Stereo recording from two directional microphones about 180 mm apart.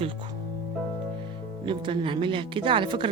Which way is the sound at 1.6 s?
25° right (ahead or behind).